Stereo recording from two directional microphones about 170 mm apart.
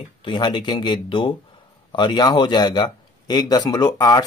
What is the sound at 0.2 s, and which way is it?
Speech, 25° left (ahead or behind).